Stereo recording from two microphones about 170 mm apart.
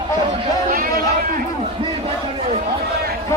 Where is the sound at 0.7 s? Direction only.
60° right (ahead or behind).